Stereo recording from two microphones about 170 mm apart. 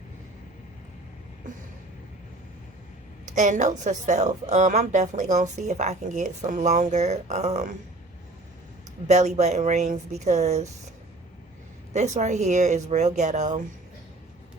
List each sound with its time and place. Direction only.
3.3 s a woman's voice: 45° right (ahead or behind)
9.0 s a woman's voice: 40° right (ahead or behind)
11.9 s a woman's voice: 45° right (ahead or behind)